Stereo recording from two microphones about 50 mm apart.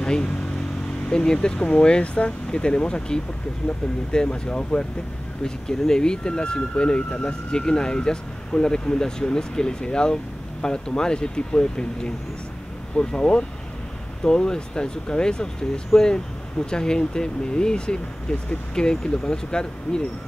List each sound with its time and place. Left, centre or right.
0.0 s vehicle: centre
1.0 s speech: centre